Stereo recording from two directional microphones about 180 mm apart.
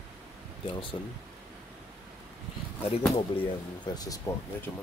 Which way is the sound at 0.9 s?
30° left (ahead or behind).